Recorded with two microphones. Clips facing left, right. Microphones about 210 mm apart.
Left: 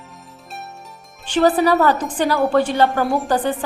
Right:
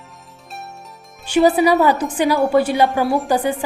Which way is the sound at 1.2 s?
10° right (ahead or behind).